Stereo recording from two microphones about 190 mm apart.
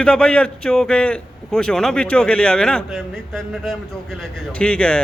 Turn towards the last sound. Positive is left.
turn(degrees=5)  # may be behind; listen again after turning